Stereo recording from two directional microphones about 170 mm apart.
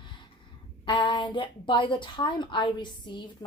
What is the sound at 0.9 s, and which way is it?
A woman's voice, 30° left (ahead or behind).